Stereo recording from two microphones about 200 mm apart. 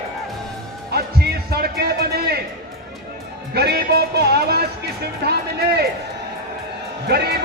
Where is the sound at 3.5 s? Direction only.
50° right (ahead or behind).